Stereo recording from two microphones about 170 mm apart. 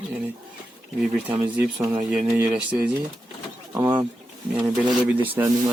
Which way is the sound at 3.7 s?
25° right (ahead or behind).